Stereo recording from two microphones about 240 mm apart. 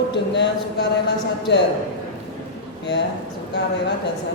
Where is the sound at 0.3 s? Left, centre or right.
Left.